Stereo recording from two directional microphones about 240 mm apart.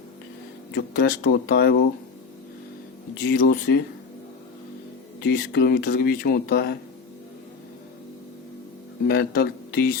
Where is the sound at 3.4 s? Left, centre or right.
Left.